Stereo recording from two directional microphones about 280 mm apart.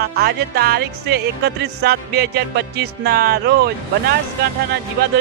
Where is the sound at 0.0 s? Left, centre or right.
Right.